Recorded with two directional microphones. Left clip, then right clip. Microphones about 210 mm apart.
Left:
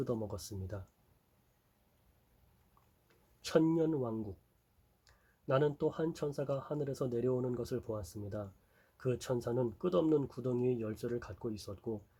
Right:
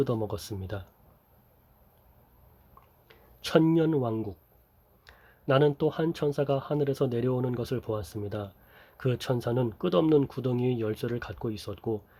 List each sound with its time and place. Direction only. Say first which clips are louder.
0.0 s speech: right 9 dB; 40° right (ahead or behind)
3.4 s speech: right 7 dB; 40° right (ahead or behind)